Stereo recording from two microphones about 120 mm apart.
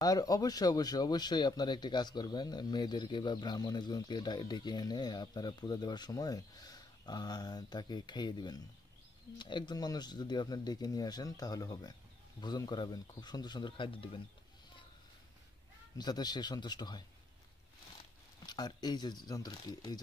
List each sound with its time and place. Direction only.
0.0 s speech: 30° left (ahead or behind)
16.0 s speech: 35° left (ahead or behind)
18.4 s speech: 35° left (ahead or behind)